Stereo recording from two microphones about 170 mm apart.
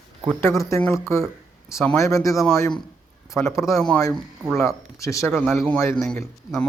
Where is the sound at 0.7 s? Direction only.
15° left (ahead or behind).